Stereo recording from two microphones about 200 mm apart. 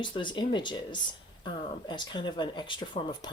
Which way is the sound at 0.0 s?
25° left (ahead or behind).